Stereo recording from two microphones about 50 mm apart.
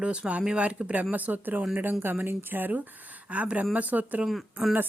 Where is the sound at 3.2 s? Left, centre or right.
Right.